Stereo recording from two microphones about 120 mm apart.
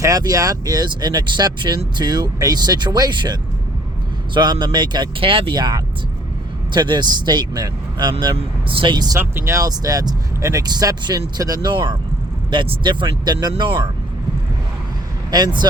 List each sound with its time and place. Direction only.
0.0 s speech: 30° right (ahead or behind)
4.4 s speech: 40° right (ahead or behind)
8.4 s speech: 50° right (ahead or behind)
9.1 s speech: 20° right (ahead or behind); by 13.8 s 45° right (ahead or behind)